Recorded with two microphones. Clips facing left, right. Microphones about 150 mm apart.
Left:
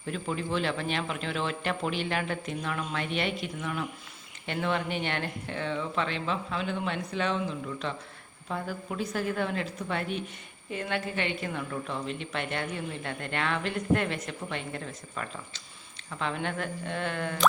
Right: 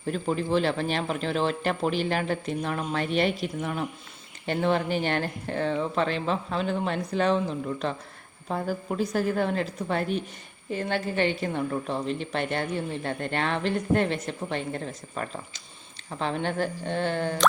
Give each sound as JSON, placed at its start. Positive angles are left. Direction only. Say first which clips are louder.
{"t": 0.0, "sound": "a woman's voice", "louder": "right 5 dB", "side_deg": -40}